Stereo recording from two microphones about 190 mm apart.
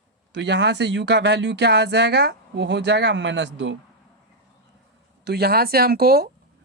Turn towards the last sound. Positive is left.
turn(degrees=-55)  # may be behind; listen again after turning